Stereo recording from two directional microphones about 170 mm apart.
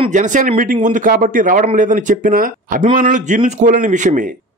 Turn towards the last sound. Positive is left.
turn(degrees=-50)  # may be behind; listen again after turning